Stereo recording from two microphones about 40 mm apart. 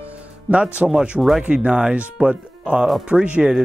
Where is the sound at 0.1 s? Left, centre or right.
Right.